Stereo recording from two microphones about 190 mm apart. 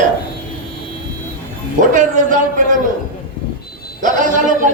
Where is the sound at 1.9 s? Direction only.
45° right (ahead or behind).